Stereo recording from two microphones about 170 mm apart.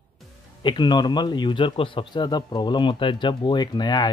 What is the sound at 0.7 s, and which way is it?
A man's voice, 25° left (ahead or behind).